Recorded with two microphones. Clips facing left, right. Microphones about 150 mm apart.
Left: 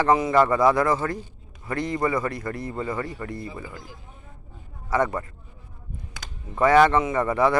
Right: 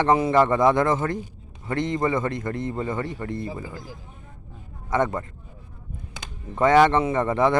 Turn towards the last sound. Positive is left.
turn(degrees=-25)  # may be behind; listen again after turning